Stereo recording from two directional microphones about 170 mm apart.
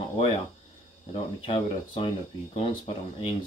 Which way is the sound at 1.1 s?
30° left (ahead or behind).